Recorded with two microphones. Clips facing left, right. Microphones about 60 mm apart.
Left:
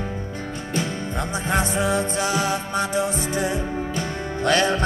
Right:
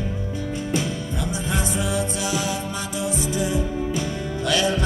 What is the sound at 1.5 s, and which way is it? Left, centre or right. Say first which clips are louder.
Music: left 5 dB; left.